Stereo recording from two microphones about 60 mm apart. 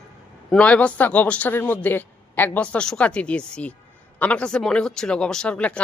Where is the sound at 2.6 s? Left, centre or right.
Left.